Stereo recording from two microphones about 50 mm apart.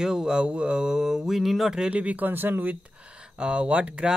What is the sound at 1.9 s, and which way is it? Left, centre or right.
Speech, right.